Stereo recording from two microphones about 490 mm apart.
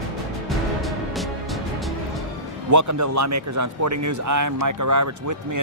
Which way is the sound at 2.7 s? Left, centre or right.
Right.